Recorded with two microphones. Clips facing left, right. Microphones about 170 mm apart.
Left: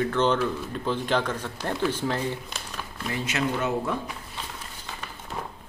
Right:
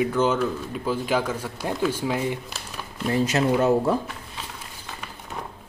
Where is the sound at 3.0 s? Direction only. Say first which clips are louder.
Right 7 dB; 35° right (ahead or behind).